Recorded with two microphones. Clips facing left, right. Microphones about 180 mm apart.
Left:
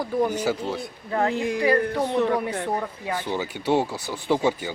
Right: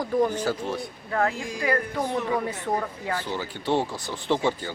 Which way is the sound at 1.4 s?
65° left (ahead or behind).